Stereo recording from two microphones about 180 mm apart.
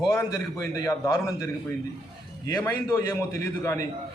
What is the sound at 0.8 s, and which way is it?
Speech, 15° left (ahead or behind).